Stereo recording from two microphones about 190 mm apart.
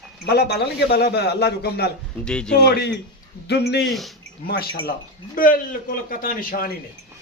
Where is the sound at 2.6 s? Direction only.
60° left (ahead or behind).